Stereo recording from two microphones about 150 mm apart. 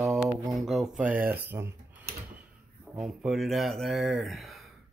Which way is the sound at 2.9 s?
Centre (ahead or behind).